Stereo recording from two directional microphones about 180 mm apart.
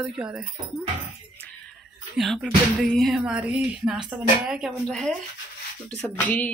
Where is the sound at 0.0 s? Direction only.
5° right (ahead or behind).